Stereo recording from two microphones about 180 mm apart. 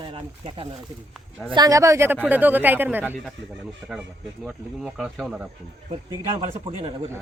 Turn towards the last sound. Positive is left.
turn(degrees=-30)  # may be behind; listen again after turning